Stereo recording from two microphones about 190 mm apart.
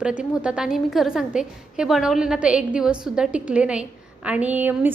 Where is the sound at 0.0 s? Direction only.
5° right (ahead or behind).